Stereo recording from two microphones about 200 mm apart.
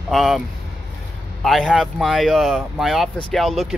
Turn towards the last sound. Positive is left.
turn(degrees=0)  # may be behind; listen again after turning